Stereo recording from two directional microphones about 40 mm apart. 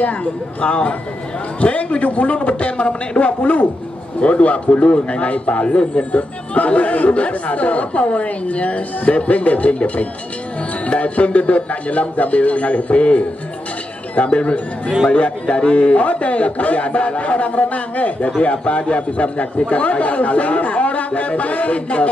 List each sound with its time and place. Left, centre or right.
0.0 s a man's voice: left